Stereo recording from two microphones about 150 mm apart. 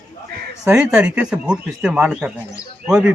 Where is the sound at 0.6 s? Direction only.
5° right (ahead or behind).